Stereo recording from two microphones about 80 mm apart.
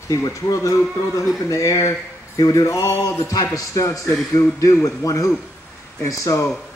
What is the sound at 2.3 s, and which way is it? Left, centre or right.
Speech, left.